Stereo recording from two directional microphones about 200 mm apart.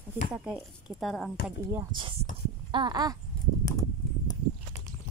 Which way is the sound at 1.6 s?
15° right (ahead or behind).